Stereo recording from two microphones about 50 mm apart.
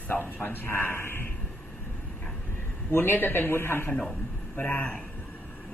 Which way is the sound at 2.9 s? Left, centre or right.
Left.